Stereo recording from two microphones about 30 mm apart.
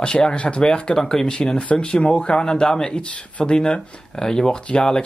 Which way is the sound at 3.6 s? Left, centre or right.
Left.